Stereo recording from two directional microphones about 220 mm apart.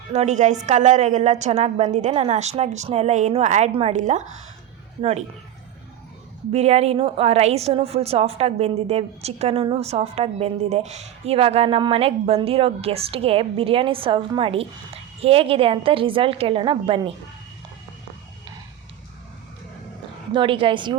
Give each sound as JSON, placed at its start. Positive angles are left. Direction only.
{"t": 0.1, "sound": "a woman's voice", "side_deg": -30}
{"t": 6.5, "sound": "a woman's voice", "side_deg": -30}
{"t": 20.3, "sound": "a woman's voice", "side_deg": -20}